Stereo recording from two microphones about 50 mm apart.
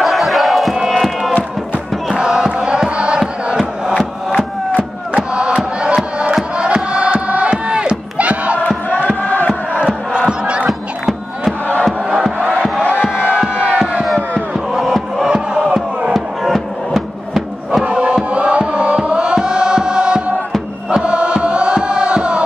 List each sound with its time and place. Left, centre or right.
0.0 s crowd: centre
0.8 s music: centre
2.1 s crowd: centre
4.4 s a sound: right
5.3 s crowd: right
6.3 s music: right
7.5 s crowd: centre
8.5 s crowd: left
9.8 s crowd: centre
10.7 s battle cry: centre
12.4 s crowd: right
14.5 s crowd: centre
16.1 s music: centre
17.8 s music: right